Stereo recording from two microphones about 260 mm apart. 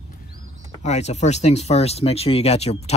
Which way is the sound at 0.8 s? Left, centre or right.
Left.